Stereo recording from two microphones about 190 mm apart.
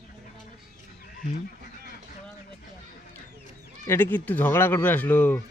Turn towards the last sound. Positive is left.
turn(degrees=10)  # may be behind; listen again after turning